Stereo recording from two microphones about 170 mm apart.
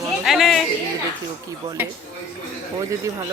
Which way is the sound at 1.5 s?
20° right (ahead or behind).